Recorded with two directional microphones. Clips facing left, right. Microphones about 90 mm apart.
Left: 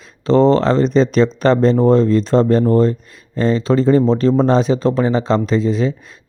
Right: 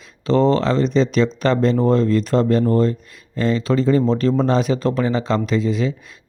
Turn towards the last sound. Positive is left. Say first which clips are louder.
# left 3 dB
turn(degrees=35)  # may be behind; listen again after turning